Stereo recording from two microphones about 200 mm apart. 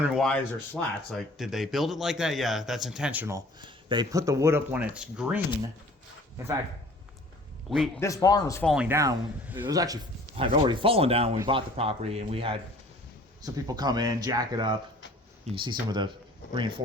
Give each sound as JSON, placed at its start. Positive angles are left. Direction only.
{"t": 0.0, "sound": "speech", "side_deg": 0}
{"t": 7.7, "sound": "speech", "side_deg": 0}
{"t": 8.0, "sound": "speech", "side_deg": 15}
{"t": 8.6, "sound": "speech", "side_deg": -5}